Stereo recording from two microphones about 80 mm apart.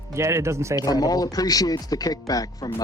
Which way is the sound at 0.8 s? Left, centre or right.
Left.